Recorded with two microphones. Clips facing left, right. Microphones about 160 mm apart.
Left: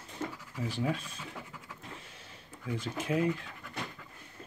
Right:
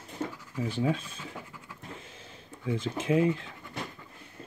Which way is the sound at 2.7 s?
25° right (ahead or behind).